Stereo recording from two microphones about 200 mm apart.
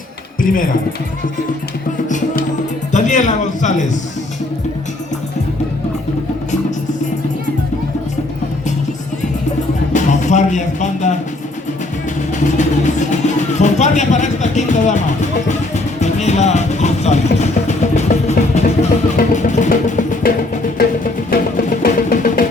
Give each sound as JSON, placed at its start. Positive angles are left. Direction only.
{"t": 0.4, "sound": "speech", "side_deg": 45}
{"t": 2.9, "sound": "a man's voice", "side_deg": 40}
{"t": 9.9, "sound": "speech", "side_deg": 35}
{"t": 12.5, "sound": "speech", "side_deg": 35}
{"t": 19.1, "sound": "music", "side_deg": 40}